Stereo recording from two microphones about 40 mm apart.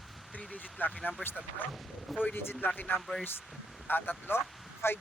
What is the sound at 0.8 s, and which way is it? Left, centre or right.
Speech, left.